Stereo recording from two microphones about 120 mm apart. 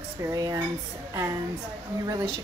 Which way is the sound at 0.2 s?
30° right (ahead or behind).